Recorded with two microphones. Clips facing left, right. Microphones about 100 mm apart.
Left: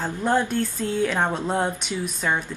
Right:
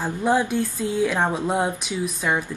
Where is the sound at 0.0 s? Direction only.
10° right (ahead or behind).